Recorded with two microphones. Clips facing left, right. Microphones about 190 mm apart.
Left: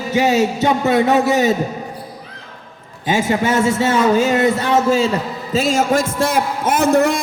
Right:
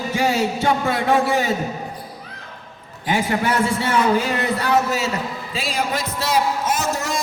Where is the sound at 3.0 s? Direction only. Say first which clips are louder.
Left 4 dB; 25° left (ahead or behind).